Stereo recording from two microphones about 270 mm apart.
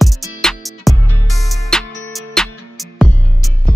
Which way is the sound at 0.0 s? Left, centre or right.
Centre.